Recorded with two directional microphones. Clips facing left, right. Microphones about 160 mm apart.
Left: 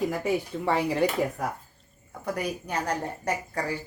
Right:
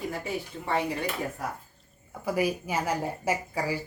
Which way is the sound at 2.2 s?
5° right (ahead or behind).